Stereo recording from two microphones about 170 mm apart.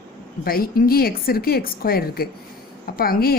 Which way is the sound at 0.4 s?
60° left (ahead or behind).